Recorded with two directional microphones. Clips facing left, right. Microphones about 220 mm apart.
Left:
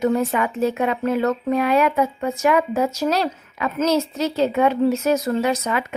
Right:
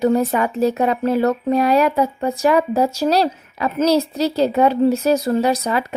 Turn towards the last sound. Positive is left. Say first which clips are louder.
# right 3 dB
turn(degrees=-35)  # may be behind; listen again after turning